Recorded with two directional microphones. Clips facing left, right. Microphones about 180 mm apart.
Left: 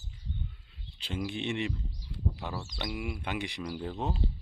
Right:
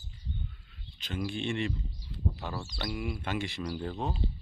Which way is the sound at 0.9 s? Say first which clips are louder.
Left 1 dB; 30° left (ahead or behind).